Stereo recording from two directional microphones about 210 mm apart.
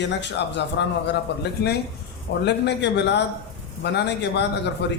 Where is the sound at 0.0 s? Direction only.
55° left (ahead or behind).